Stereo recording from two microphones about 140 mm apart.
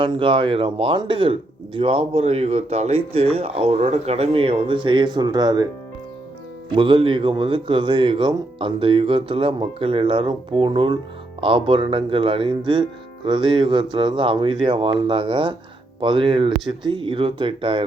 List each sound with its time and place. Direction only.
0.0 s speech: 35° right (ahead or behind)
6.7 s speech: 35° right (ahead or behind)